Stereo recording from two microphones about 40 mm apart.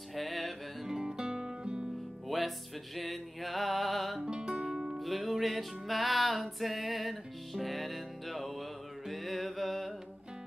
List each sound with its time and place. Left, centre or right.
0.1 s music: centre
0.8 s music: centre
2.2 s music: centre
4.2 s music: centre
4.6 s music: centre